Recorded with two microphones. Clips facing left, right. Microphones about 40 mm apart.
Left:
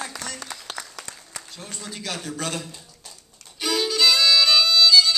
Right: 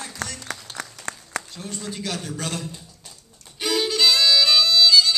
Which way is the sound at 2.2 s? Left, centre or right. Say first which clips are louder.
Even; left.